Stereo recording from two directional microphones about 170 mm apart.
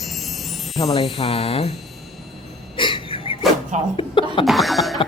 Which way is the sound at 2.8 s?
30° left (ahead or behind).